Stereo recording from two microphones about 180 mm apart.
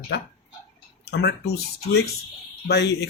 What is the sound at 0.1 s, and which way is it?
Speech, 60° left (ahead or behind).